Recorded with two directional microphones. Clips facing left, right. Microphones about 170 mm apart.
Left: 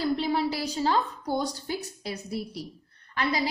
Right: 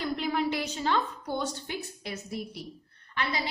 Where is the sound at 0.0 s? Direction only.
30° left (ahead or behind).